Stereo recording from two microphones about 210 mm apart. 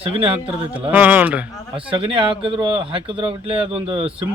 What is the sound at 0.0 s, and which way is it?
Speech, 25° right (ahead or behind).